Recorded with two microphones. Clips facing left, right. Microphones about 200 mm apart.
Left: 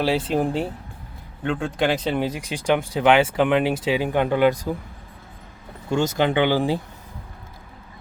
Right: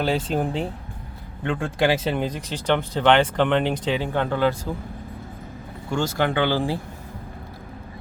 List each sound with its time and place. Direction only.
0.3 s speech: 5° left (ahead or behind)
5.9 s speech: 20° left (ahead or behind)